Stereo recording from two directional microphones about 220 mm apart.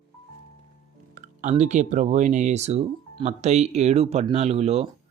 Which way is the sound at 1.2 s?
30° right (ahead or behind).